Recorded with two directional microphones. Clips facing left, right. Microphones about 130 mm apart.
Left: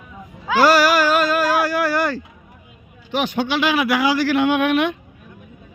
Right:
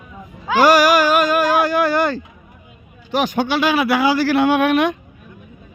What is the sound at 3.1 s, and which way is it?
A man's voice, 45° right (ahead or behind).